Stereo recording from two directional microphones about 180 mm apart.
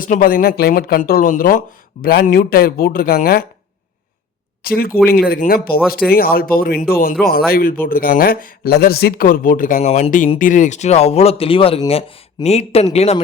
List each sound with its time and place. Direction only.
0.0 s speech: 50° left (ahead or behind)
4.6 s speech: 55° left (ahead or behind); by 13.2 s 35° left (ahead or behind)